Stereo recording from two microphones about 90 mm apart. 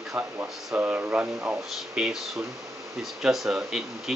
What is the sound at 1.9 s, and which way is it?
Speech, 10° right (ahead or behind).